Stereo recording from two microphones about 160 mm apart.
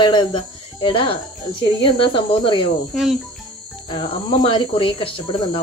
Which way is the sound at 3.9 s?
35° left (ahead or behind).